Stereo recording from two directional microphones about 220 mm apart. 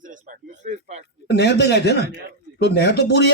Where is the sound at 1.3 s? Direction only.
50° left (ahead or behind).